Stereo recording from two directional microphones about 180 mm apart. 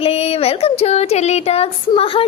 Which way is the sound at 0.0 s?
35° left (ahead or behind).